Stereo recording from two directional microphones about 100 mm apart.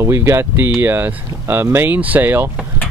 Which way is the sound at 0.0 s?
25° right (ahead or behind).